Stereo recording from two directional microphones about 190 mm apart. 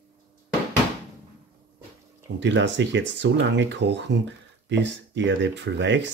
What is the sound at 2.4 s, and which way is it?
Speech, 70° right (ahead or behind).